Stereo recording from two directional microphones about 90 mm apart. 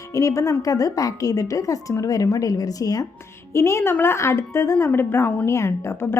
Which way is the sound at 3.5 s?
30° left (ahead or behind).